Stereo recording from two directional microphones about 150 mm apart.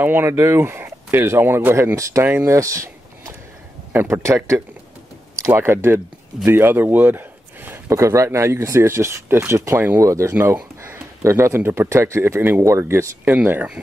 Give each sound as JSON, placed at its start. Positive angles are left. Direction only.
{"t": 0.0, "sound": "a man's voice", "side_deg": -15}